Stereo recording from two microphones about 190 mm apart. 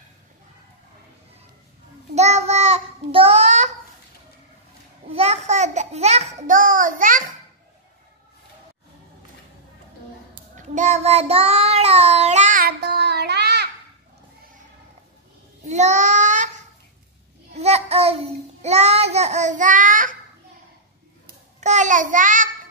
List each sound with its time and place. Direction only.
2.1 s child singing: 35° right (ahead or behind)
5.1 s a sound: 35° right (ahead or behind)
10.5 s child singing: 40° right (ahead or behind); by 13.7 s 60° right (ahead or behind)
15.6 s child singing: 40° right (ahead or behind)
21.5 s child singing: 40° right (ahead or behind)